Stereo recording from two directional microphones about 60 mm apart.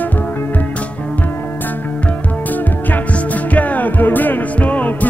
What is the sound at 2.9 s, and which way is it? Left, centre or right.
Music, left.